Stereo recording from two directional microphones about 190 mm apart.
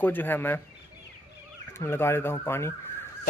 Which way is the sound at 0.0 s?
10° left (ahead or behind).